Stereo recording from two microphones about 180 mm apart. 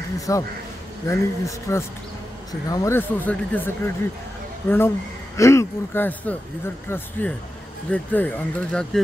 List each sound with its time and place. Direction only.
0.3 s speech: 20° left (ahead or behind)